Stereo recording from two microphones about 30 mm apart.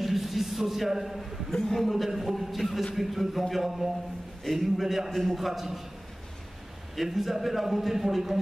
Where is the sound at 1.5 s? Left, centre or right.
Left.